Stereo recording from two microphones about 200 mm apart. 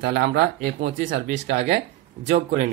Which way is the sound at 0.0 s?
60° right (ahead or behind).